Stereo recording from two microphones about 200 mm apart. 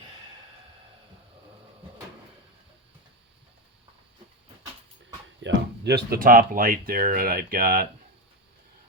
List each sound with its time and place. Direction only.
5.4 s speech: 65° right (ahead or behind); by 7.9 s 45° right (ahead or behind)